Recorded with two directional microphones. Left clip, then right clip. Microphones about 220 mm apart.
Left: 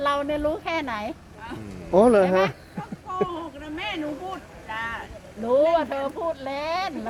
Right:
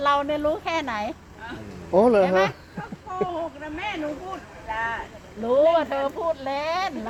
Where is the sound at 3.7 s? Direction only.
45° left (ahead or behind).